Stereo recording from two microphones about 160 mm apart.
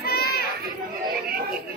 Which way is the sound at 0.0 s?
75° left (ahead or behind).